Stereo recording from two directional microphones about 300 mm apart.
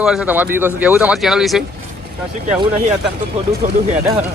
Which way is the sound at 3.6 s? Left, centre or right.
Right.